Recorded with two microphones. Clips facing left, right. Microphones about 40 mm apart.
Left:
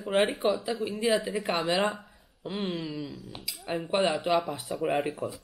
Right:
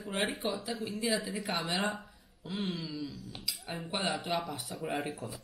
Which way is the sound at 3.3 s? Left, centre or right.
Centre.